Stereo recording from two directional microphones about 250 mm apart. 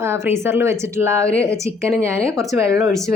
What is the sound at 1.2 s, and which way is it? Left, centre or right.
Speech, centre.